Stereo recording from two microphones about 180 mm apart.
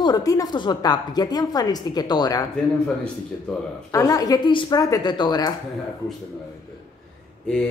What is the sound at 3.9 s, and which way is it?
A woman's voice, 20° left (ahead or behind).